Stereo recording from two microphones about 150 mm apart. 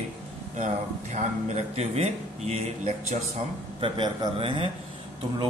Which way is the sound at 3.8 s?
35° right (ahead or behind).